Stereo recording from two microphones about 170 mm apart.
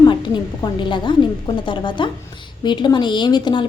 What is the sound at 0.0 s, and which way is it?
A woman's voice, 25° left (ahead or behind).